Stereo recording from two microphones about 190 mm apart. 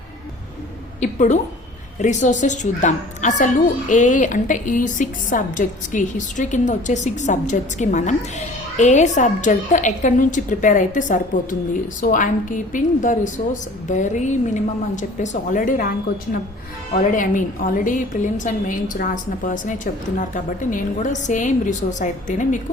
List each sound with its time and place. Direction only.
0.9 s a woman's voice: 40° left (ahead or behind)
17.1 s a woman's voice: 45° left (ahead or behind)